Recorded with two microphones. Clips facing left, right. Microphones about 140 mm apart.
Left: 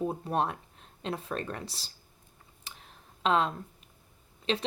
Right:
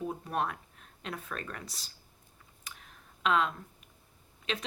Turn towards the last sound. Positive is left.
turn(degrees=35)  # may be behind; listen again after turning